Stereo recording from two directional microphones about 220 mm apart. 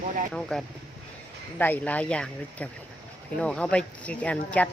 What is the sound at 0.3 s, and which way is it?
Speech, 5° left (ahead or behind).